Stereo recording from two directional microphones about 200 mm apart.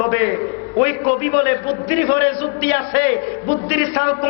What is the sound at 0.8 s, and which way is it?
A man's voice, 20° left (ahead or behind).